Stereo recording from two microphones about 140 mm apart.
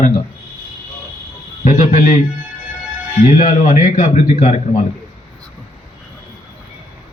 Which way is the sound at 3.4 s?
65° left (ahead or behind).